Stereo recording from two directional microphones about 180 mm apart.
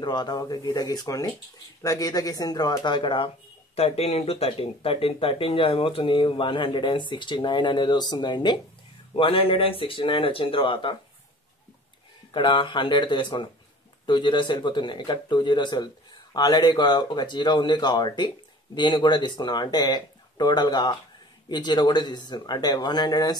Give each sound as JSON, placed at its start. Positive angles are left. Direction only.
{"t": 0.0, "sound": "speech", "side_deg": 25}
{"t": 12.3, "sound": "speech", "side_deg": 25}